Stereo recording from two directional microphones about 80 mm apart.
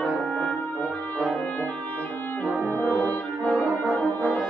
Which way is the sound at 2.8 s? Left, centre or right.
Left.